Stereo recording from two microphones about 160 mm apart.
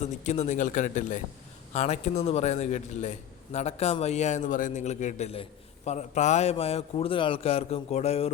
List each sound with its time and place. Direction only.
0.0 s a man's voice: 45° left (ahead or behind)